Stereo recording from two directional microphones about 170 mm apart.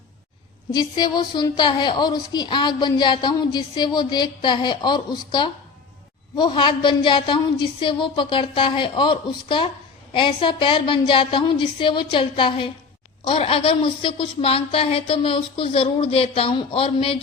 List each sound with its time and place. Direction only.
0.7 s a woman's voice: 25° left (ahead or behind)